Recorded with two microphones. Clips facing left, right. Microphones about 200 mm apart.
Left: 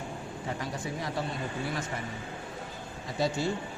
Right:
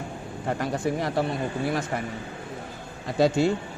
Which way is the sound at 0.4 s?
60° right (ahead or behind).